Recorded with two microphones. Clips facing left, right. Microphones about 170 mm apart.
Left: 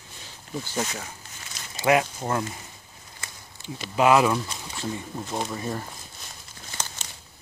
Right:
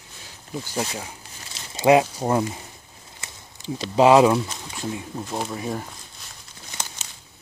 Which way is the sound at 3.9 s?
30° right (ahead or behind).